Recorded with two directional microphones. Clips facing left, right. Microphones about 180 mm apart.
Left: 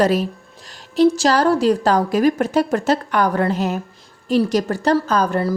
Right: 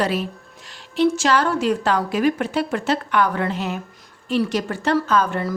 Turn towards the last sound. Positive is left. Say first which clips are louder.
# left 2 dB
turn(degrees=40)  # may be behind; listen again after turning